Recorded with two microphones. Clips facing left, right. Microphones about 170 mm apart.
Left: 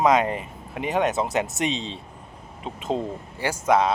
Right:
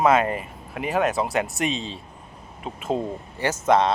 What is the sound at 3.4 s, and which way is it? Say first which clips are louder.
Speech: right 1 dB; 10° left (ahead or behind).